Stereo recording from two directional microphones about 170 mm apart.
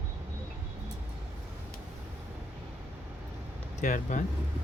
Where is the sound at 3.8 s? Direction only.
50° left (ahead or behind).